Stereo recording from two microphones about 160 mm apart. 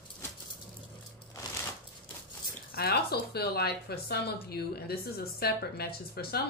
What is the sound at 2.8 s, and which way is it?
Speech, 75° left (ahead or behind).